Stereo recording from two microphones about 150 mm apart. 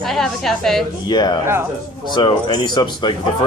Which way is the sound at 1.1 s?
25° left (ahead or behind).